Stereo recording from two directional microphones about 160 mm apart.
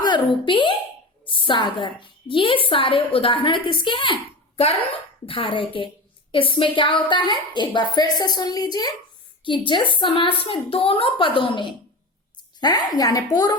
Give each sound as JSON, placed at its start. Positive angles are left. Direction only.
{"t": 0.4, "sound": "a woman's voice", "side_deg": 30}